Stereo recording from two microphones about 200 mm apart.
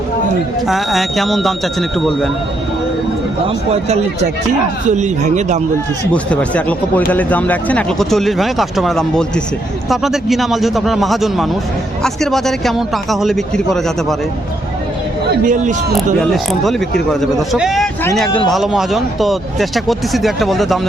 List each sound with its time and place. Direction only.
0.7 s speech: centre (ahead or behind)
3.4 s speech: 30° right (ahead or behind)
6.3 s speech: 5° left (ahead or behind)
15.3 s a man's voice: 40° right (ahead or behind)
16.1 s speech: centre (ahead or behind)